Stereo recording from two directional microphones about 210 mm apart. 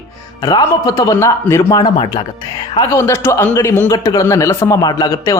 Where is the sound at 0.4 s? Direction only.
15° left (ahead or behind).